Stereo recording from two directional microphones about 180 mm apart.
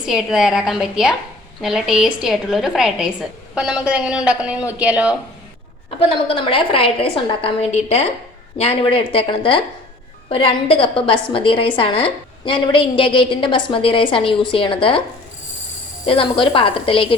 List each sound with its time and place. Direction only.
0.1 s a woman's voice: centre (ahead or behind)
6.2 s a woman's voice: 30° left (ahead or behind)
16.0 s a woman's voice: 30° left (ahead or behind)